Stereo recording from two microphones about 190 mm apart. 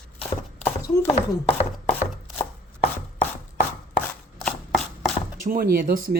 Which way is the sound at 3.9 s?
5° left (ahead or behind).